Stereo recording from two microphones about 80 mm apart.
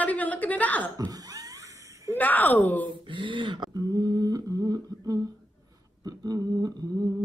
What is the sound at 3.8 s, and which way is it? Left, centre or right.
Humming, right.